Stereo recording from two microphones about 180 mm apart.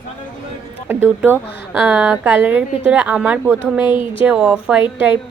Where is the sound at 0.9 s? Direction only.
10° right (ahead or behind).